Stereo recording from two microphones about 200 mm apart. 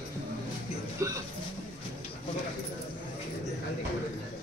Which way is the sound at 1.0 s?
15° right (ahead or behind).